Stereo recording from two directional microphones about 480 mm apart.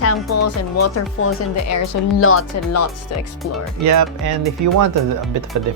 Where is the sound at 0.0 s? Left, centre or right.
Left.